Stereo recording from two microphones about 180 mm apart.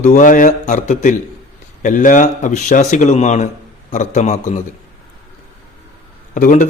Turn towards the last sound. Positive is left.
turn(degrees=45)  # may be behind; listen again after turning